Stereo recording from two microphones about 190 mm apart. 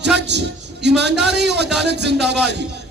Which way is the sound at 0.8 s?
65° right (ahead or behind).